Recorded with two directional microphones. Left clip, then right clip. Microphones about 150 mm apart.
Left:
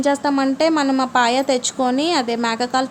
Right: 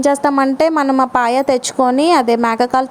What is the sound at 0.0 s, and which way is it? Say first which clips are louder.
Speech: right 5 dB; 50° right (ahead or behind).